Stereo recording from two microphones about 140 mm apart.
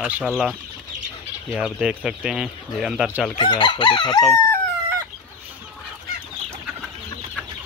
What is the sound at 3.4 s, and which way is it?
Chicken, 35° left (ahead or behind).